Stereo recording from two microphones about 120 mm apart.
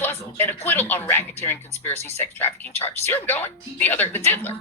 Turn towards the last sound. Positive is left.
turn(degrees=20)  # may be behind; listen again after turning